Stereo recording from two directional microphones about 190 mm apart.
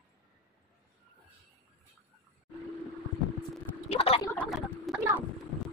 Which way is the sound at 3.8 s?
30° left (ahead or behind).